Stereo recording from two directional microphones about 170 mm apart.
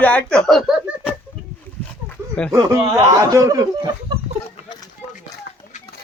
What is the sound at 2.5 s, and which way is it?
Speech, 20° right (ahead or behind).